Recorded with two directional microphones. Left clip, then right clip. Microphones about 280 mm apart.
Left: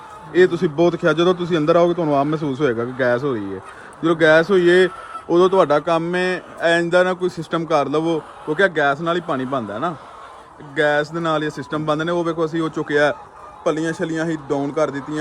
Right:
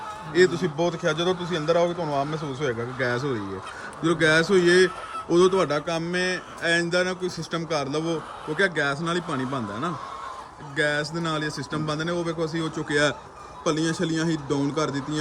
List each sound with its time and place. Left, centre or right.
0.3 s speech: centre
1.7 s speech: left
2.3 s a man's voice: centre